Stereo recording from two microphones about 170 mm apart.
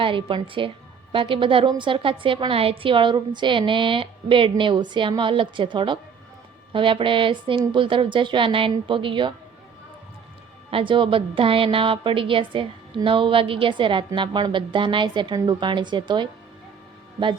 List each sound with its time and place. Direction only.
0.0 s a woman's voice: 30° right (ahead or behind)
10.7 s a woman's voice: 30° right (ahead or behind)